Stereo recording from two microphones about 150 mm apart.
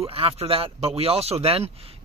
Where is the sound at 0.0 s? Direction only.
40° right (ahead or behind).